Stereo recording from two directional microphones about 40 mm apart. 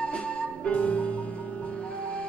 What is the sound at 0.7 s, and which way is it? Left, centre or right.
Music, left.